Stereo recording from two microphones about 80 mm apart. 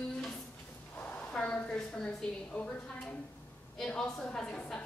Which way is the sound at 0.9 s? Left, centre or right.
Centre.